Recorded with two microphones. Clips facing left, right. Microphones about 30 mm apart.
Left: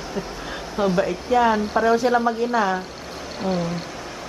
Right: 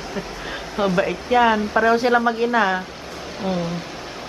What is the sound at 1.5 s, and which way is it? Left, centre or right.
Speech, right.